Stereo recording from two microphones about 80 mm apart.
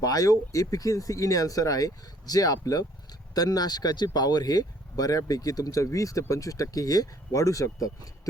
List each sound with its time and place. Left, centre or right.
0.0 s speech: left